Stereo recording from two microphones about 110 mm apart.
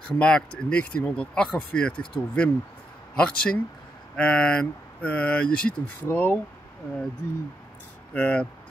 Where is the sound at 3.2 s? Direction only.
10° left (ahead or behind).